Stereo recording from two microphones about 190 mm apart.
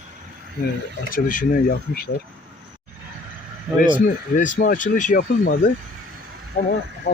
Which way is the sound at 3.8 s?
45° left (ahead or behind).